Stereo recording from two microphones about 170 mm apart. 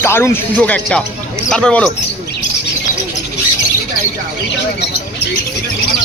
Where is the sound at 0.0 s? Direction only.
15° left (ahead or behind).